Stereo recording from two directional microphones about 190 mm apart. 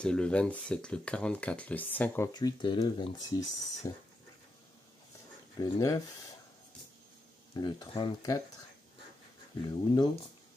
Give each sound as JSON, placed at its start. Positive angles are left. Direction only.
{"t": 0.0, "sound": "speech", "side_deg": 5}
{"t": 2.3, "sound": "speech", "side_deg": 25}
{"t": 5.6, "sound": "speech", "side_deg": 20}
{"t": 7.5, "sound": "speech", "side_deg": 20}
{"t": 9.7, "sound": "speech", "side_deg": 20}